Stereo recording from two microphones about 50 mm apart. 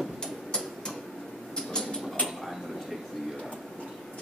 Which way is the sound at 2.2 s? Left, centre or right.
Centre.